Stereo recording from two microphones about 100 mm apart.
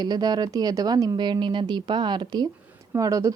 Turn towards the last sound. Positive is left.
turn(degrees=-35)  # may be behind; listen again after turning